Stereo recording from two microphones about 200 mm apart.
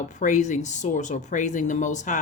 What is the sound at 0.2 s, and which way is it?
Speech, 35° left (ahead or behind).